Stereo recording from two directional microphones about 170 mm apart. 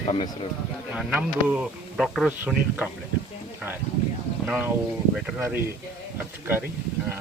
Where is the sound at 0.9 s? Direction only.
5° right (ahead or behind).